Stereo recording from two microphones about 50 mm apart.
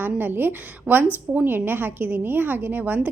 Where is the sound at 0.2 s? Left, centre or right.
Right.